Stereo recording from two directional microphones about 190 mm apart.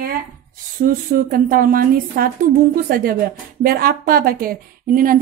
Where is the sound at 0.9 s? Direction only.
50° right (ahead or behind).